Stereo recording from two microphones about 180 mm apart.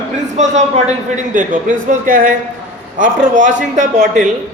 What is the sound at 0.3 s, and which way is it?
A man's voice, 40° right (ahead or behind).